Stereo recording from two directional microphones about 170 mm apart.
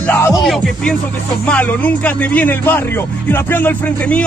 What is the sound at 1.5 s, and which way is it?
Speech, 10° left (ahead or behind).